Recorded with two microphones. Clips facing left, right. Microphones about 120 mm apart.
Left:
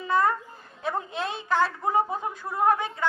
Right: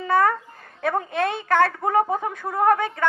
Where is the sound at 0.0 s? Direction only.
60° right (ahead or behind).